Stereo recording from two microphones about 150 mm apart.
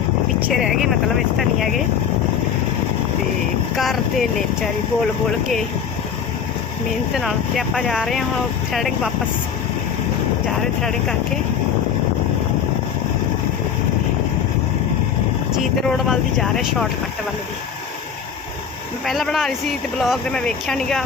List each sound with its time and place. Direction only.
0.5 s speech: centre (ahead or behind)
3.8 s speech: centre (ahead or behind)
7.1 s speech: centre (ahead or behind)
15.5 s speech: centre (ahead or behind)
19.0 s speech: centre (ahead or behind)